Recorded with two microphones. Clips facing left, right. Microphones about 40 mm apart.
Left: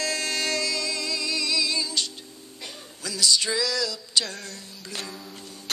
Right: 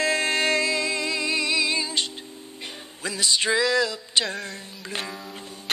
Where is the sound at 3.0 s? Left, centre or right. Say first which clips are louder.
Right 1 dB; right.